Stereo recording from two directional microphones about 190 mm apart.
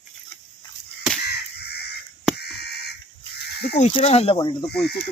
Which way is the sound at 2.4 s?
60° left (ahead or behind).